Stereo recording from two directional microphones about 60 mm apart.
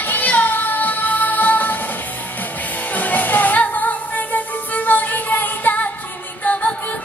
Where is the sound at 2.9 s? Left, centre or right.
Left.